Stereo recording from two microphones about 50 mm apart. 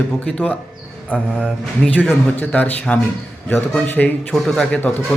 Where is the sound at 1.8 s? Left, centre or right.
Centre.